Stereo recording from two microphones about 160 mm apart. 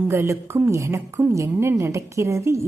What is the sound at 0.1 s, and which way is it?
Speech, 15° right (ahead or behind).